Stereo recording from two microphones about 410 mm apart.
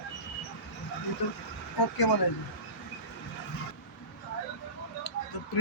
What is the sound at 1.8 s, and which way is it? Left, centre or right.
Speech, left.